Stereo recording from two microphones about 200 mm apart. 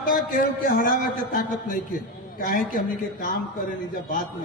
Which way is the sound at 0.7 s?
45° left (ahead or behind).